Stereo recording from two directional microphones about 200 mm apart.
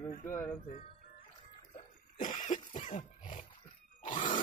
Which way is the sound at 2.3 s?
40° left (ahead or behind).